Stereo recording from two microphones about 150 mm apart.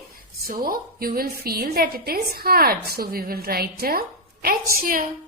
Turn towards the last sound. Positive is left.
turn(degrees=-70)  # may be behind; listen again after turning